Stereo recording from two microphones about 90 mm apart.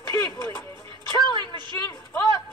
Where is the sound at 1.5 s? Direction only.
60° right (ahead or behind).